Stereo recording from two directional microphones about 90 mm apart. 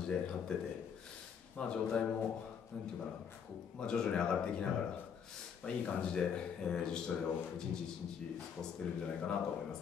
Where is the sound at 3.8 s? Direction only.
10° left (ahead or behind).